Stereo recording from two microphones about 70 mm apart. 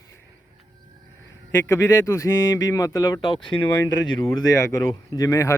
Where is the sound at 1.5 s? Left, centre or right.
Left.